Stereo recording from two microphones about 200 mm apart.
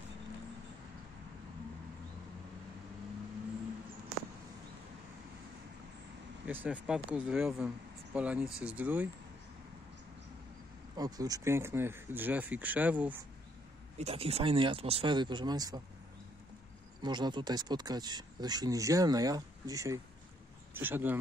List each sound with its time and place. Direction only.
6.4 s speech: 5° right (ahead or behind)
11.0 s speech: 20° right (ahead or behind)
13.9 s speech: 30° right (ahead or behind)
17.0 s speech: 20° right (ahead or behind)